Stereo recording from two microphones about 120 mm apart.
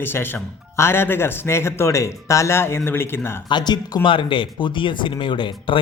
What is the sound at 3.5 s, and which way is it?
Speech, 35° left (ahead or behind).